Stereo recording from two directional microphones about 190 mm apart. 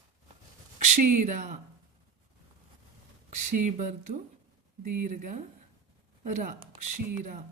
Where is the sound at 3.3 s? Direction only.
40° right (ahead or behind).